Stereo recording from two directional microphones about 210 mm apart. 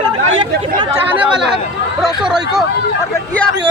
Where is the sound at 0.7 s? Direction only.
10° right (ahead or behind).